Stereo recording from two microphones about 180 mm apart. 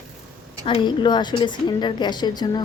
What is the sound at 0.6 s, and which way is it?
A woman's voice, 30° left (ahead or behind).